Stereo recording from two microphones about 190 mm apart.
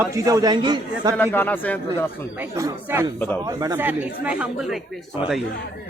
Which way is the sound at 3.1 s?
10° left (ahead or behind).